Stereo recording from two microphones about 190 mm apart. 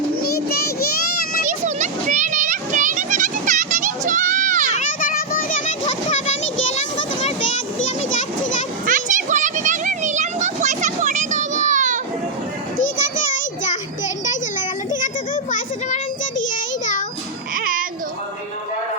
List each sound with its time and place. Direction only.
0.2 s child singing: 55° left (ahead or behind)
1.5 s children playing: 40° right (ahead or behind)
4.7 s children playing: 45° left (ahead or behind)
6.7 s a sound: 35° left (ahead or behind)
8.9 s children playing: 45° right (ahead or behind)
12.7 s children playing: 40° left (ahead or behind)
15.0 s a sound: 45° left (ahead or behind)
17.5 s babbling: 45° right (ahead or behind)